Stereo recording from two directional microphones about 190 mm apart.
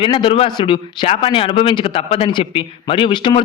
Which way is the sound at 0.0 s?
25° left (ahead or behind).